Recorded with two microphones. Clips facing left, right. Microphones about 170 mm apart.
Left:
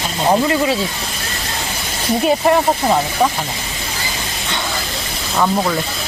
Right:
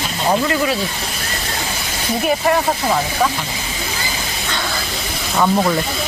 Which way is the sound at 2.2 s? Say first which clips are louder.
Left 3 dB; 25° left (ahead or behind).